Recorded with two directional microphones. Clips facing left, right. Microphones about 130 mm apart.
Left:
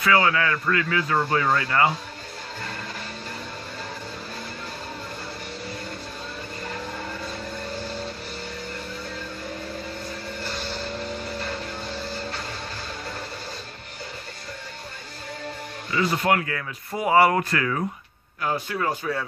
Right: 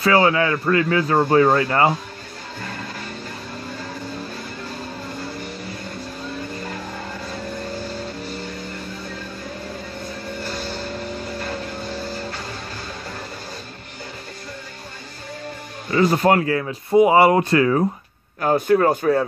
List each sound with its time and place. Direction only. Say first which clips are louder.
0.0 s a man's voice: right 4 dB; 30° right (ahead or behind)
15.9 s speech: right 6 dB; 40° right (ahead or behind)
18.4 s speech: right 10 dB; 45° right (ahead or behind)